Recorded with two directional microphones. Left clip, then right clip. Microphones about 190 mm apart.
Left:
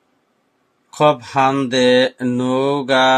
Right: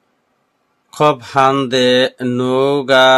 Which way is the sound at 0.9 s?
30° right (ahead or behind).